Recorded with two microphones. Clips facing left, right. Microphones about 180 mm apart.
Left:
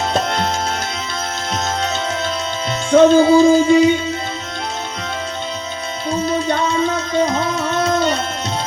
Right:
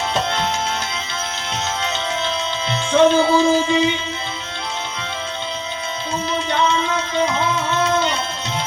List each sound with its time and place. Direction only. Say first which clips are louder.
0.1 s music: left 3 dB; 40° left (ahead or behind)
1.8 s music: left 2 dB; 40° left (ahead or behind)
6.2 s music: even; 40° left (ahead or behind)